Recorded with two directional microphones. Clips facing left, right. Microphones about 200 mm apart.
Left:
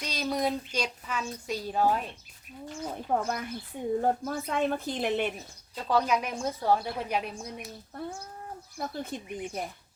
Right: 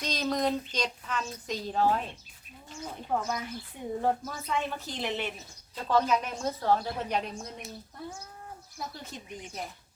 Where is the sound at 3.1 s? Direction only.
50° left (ahead or behind).